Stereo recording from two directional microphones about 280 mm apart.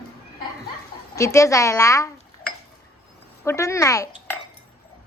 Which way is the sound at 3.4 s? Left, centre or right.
Centre.